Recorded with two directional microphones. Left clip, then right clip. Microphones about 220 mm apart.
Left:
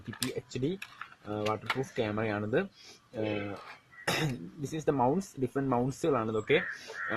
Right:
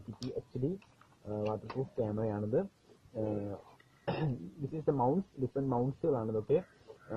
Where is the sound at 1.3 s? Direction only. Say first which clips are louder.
Left 5 dB; 40° left (ahead or behind).